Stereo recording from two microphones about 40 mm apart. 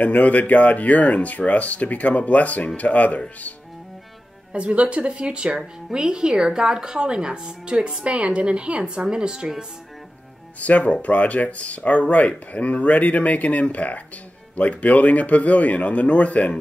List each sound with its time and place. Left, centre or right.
0.0 s speech: left
4.5 s a woman's voice: right
10.6 s speech: left